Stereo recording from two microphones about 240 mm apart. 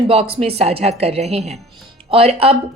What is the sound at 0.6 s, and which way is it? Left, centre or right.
Speech, right.